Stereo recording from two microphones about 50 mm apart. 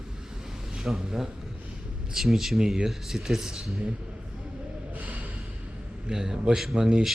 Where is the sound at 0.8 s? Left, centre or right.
Centre.